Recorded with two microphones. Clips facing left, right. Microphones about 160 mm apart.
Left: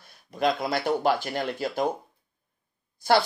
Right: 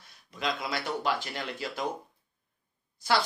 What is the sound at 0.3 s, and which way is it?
Speech, 55° left (ahead or behind).